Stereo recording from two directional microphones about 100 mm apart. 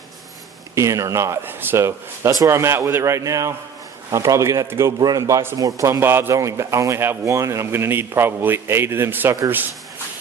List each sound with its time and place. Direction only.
0.8 s speech: 30° right (ahead or behind)